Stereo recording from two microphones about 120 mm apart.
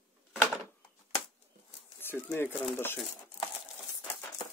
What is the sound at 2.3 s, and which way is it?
Speech, 20° left (ahead or behind).